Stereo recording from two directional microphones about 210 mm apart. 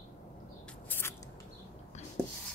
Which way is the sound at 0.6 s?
5° left (ahead or behind).